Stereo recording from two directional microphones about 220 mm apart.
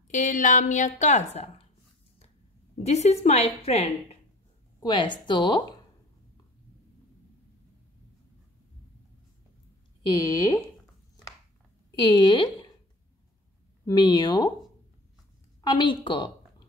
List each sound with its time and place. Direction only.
0.1 s a woman's voice: 35° left (ahead or behind)
2.8 s a woman's voice: 30° left (ahead or behind)
10.2 s speech: 15° left (ahead or behind)
11.9 s speech: 20° left (ahead or behind)
13.8 s a woman's voice: 20° left (ahead or behind)
15.6 s a woman's voice: 20° left (ahead or behind)